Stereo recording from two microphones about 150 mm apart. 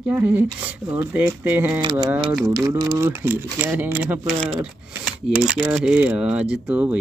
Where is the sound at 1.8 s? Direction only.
30° right (ahead or behind); by 4.2 s 10° right (ahead or behind).